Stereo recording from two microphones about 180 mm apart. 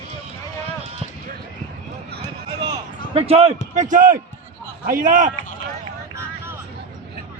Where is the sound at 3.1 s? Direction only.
35° right (ahead or behind).